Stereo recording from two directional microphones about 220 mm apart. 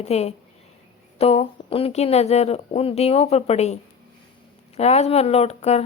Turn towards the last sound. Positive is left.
turn(degrees=30)  # may be behind; listen again after turning